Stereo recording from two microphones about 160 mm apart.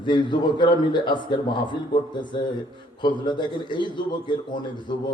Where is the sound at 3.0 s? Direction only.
30° left (ahead or behind).